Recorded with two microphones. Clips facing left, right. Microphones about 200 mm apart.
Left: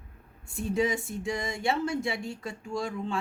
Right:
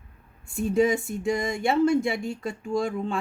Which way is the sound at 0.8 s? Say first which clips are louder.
Right 6 dB; 50° right (ahead or behind).